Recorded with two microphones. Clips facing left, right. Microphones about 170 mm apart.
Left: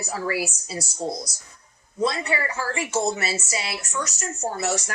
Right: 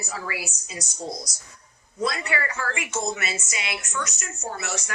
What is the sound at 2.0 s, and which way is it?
A woman's voice, 30° left (ahead or behind).